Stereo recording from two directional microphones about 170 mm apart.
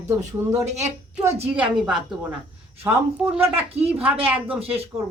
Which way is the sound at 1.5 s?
5° right (ahead or behind).